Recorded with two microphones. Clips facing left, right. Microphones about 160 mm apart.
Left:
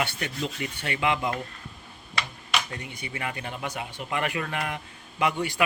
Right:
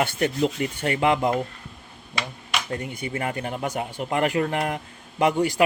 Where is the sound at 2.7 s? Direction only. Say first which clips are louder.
Right 8 dB; 50° right (ahead or behind).